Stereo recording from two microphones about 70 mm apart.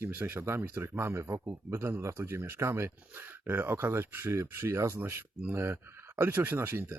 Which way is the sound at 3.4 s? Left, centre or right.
Right.